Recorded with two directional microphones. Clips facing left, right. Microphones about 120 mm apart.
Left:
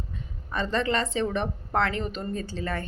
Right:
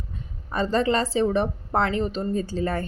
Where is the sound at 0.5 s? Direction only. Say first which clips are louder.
Right 4 dB; 35° right (ahead or behind).